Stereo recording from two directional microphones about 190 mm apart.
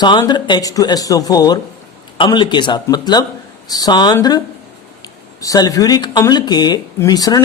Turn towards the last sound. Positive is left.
turn(degrees=20)  # may be behind; listen again after turning